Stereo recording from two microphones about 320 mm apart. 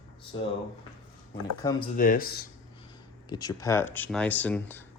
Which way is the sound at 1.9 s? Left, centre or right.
Left.